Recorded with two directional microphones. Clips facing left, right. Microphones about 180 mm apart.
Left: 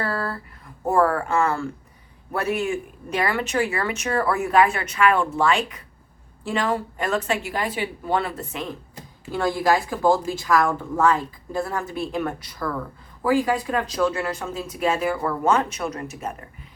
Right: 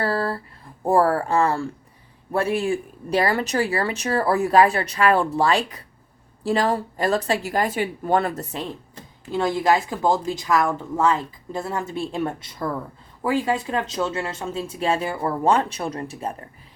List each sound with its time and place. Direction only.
0.0 s a sound: 30° right (ahead or behind)
0.9 s speech: 30° right (ahead or behind)
9.3 s speech: 20° right (ahead or behind)